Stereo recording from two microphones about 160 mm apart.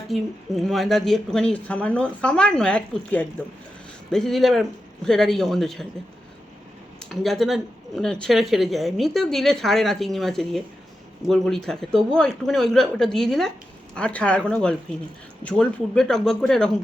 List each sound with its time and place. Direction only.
0.1 s speech: centre (ahead or behind)
7.0 s speech: centre (ahead or behind)